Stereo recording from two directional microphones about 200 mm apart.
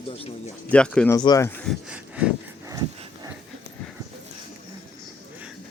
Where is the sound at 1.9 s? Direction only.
5° right (ahead or behind).